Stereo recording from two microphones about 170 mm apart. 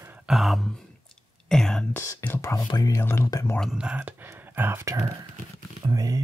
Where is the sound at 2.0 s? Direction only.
15° left (ahead or behind).